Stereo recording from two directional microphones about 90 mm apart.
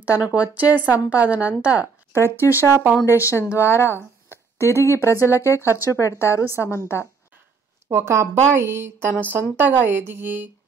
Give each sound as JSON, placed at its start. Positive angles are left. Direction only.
{"t": 0.0, "sound": "a woman's voice", "side_deg": -15}
{"t": 2.4, "sound": "a woman's voice", "side_deg": 30}
{"t": 2.7, "sound": "a woman's voice", "side_deg": -25}
{"t": 3.1, "sound": "a woman's voice", "side_deg": 30}
{"t": 7.9, "sound": "a woman's voice", "side_deg": -30}